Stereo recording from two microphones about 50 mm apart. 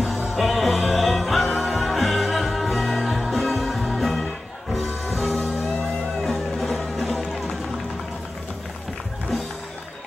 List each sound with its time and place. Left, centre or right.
0.3 s music: centre